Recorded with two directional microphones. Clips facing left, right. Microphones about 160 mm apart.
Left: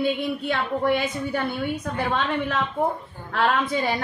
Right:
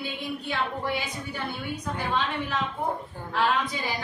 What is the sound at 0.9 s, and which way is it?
A woman's voice, 60° left (ahead or behind).